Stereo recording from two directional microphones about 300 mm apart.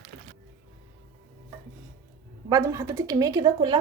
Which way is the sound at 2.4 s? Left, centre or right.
Centre.